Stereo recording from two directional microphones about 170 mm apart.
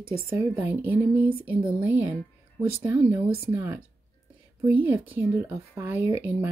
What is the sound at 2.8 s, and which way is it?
Speech, 10° right (ahead or behind).